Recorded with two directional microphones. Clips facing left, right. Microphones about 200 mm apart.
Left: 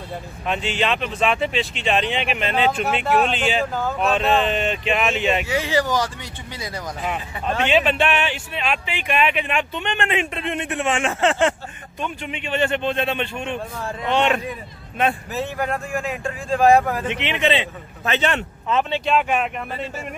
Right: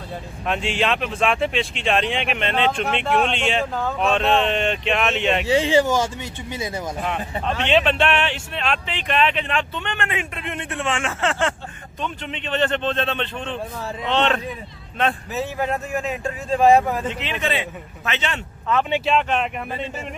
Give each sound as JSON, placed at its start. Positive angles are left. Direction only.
{"t": 0.5, "sound": "speech", "side_deg": 0}
{"t": 5.5, "sound": "speech", "side_deg": -25}
{"t": 7.6, "sound": "a man's voice", "side_deg": 5}
{"t": 15.7, "sound": "speech", "side_deg": -5}
{"t": 17.1, "sound": "speech", "side_deg": 25}
{"t": 18.0, "sound": "a man's voice", "side_deg": 40}
{"t": 19.0, "sound": "speech", "side_deg": 5}